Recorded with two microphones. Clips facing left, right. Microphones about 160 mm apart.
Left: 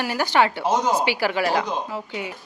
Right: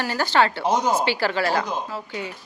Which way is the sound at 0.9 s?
10° left (ahead or behind).